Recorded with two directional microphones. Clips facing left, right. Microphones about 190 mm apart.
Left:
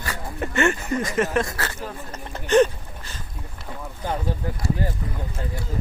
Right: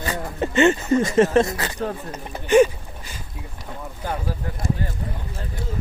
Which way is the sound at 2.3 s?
10° right (ahead or behind).